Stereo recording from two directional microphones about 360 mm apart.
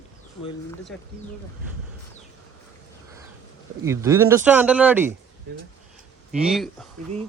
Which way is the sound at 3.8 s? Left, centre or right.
Centre.